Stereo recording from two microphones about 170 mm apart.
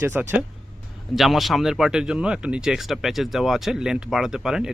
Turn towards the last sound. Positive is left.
turn(degrees=-5)  # may be behind; listen again after turning